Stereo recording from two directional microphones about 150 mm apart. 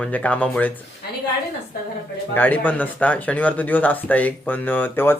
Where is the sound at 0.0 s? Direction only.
10° left (ahead or behind).